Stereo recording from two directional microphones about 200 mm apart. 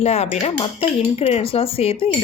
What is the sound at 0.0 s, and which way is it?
Speech, 30° left (ahead or behind).